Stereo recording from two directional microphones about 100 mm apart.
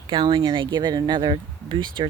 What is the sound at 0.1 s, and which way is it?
Speech, 50° right (ahead or behind).